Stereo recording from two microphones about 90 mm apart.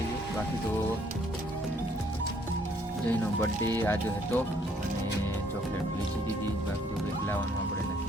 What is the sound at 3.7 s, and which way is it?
Speech, 25° left (ahead or behind).